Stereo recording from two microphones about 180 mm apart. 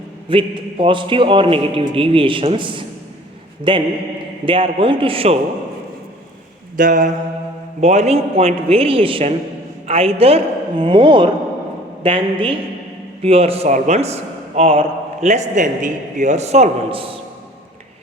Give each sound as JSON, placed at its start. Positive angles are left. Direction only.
{"t": 0.3, "sound": "a man's voice", "side_deg": -30}
{"t": 6.7, "sound": "mantra", "side_deg": -45}
{"t": 7.8, "sound": "a man's voice", "side_deg": -40}